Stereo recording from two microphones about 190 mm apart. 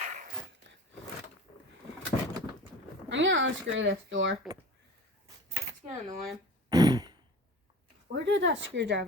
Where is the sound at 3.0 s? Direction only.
75° right (ahead or behind).